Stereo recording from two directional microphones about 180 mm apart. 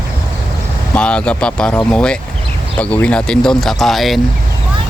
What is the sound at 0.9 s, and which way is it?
Speech, 5° left (ahead or behind).